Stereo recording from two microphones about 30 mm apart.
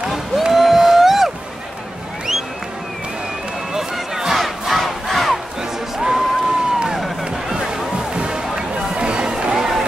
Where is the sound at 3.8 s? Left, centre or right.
Centre.